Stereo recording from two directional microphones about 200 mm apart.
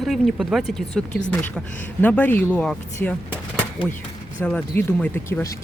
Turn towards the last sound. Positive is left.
turn(degrees=10)  # may be behind; listen again after turning